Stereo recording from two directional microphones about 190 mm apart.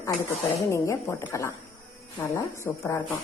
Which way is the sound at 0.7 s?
15° left (ahead or behind).